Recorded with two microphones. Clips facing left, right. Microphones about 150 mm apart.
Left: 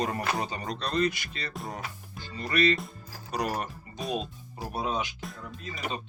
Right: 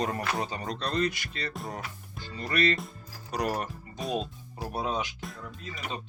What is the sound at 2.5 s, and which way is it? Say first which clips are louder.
Speech: left 2 dB; 10° left (ahead or behind).